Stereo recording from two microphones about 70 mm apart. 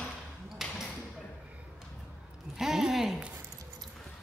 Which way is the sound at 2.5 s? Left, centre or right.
Centre.